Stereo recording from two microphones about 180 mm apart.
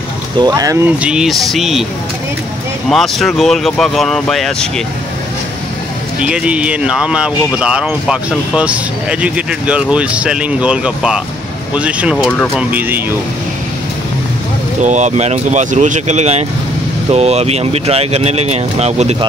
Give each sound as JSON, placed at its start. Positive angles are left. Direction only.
{"t": 0.4, "sound": "speech", "side_deg": -20}
{"t": 0.9, "sound": "speech", "side_deg": -5}
{"t": 2.9, "sound": "speech", "side_deg": 0}
{"t": 6.2, "sound": "speech", "side_deg": -5}
{"t": 14.8, "sound": "speech", "side_deg": -40}